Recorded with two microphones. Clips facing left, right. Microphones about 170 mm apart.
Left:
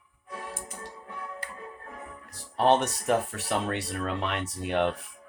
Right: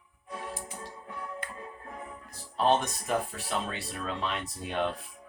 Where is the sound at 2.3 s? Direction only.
75° left (ahead or behind).